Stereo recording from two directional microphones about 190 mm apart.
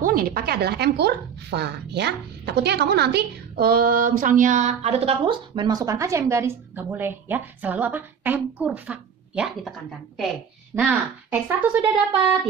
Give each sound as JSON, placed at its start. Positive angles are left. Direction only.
{"t": 0.0, "sound": "speech", "side_deg": -50}